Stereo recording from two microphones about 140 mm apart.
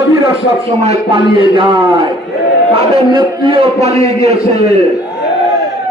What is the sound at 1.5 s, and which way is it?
A man's voice, 40° right (ahead or behind).